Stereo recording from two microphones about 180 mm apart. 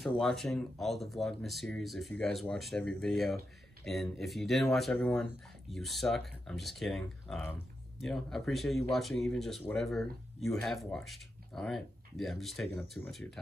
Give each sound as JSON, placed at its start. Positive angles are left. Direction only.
{"t": 0.2, "sound": "speech", "side_deg": 0}